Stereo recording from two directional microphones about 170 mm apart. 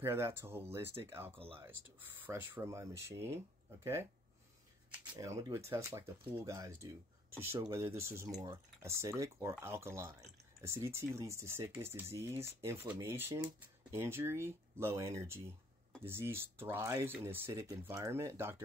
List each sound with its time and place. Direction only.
0.0 s speech: 15° right (ahead or behind)
1.3 s speech: 30° right (ahead or behind)
2.0 s speech: 10° right (ahead or behind)
5.1 s speech: 20° right (ahead or behind)